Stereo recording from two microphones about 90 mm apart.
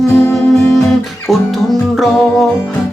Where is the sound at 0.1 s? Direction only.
30° left (ahead or behind).